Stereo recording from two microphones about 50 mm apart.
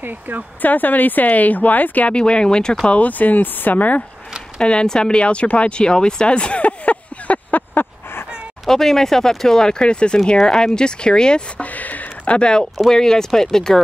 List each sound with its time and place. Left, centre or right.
0.0 s speech: right
0.6 s speech: left
2.1 s speech: centre
2.9 s speech: left
4.6 s speech: centre
7.7 s fowl: left
8.6 s speech: centre
11.6 s a sound: left
12.4 s speech: centre